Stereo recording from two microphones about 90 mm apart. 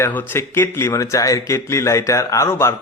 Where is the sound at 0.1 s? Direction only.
25° left (ahead or behind).